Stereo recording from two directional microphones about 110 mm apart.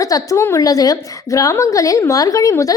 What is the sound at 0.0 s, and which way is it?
A woman's voice, 30° left (ahead or behind).